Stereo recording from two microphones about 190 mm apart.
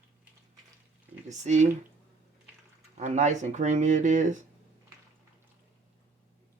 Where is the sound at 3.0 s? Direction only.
40° right (ahead or behind).